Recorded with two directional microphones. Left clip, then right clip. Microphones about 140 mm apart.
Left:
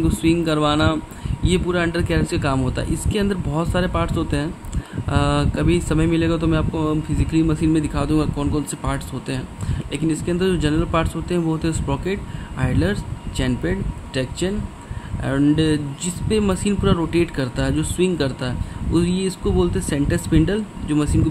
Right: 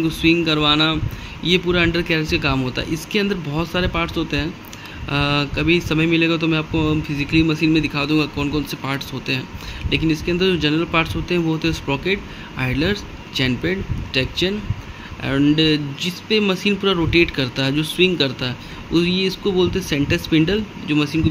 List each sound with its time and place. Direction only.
0.0 s speech: 35° left (ahead or behind)